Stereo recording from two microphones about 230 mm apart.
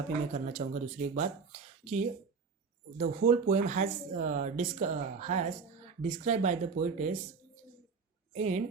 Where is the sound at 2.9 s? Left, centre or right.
Right.